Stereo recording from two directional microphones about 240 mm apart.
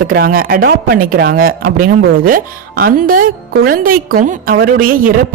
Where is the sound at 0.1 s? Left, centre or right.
Right.